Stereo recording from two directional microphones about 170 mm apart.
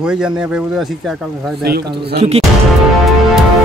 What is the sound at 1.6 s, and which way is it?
Speech, 70° right (ahead or behind).